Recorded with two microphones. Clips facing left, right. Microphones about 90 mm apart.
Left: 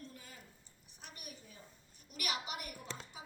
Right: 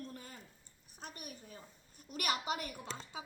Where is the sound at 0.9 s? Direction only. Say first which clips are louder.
Right 5 dB; 40° right (ahead or behind).